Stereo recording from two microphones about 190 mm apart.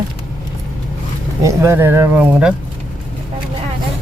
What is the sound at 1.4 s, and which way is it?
Speech, 15° right (ahead or behind).